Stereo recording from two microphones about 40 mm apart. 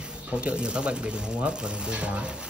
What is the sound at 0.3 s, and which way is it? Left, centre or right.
Speech, right.